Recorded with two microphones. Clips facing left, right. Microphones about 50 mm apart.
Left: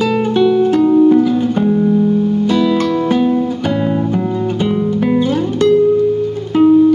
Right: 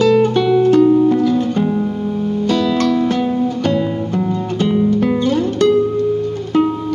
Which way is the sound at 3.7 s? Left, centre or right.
Centre.